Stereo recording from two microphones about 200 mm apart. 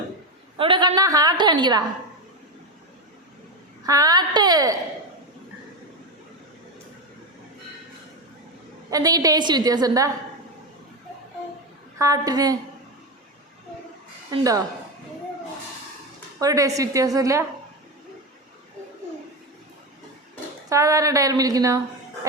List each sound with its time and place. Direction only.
0.5 s a woman's voice: 25° right (ahead or behind)
3.8 s a woman's voice: 20° right (ahead or behind)
8.9 s a woman's voice: 20° right (ahead or behind)
11.9 s a woman's voice: 15° right (ahead or behind)
14.3 s a woman's voice: 20° right (ahead or behind)
16.4 s a woman's voice: 15° right (ahead or behind)
20.7 s a woman's voice: 15° right (ahead or behind)